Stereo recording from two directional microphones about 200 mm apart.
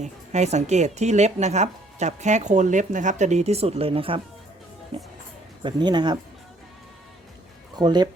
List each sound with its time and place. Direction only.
0.0 s speech: 35° right (ahead or behind)
7.8 s speech: 20° right (ahead or behind)